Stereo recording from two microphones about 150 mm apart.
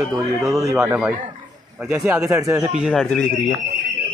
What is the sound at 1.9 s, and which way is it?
Speech, 10° right (ahead or behind).